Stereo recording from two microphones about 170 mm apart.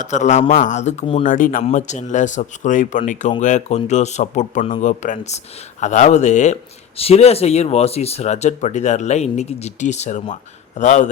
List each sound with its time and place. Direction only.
0.0 s speech: 45° left (ahead or behind)
1.2 s speech: 50° left (ahead or behind)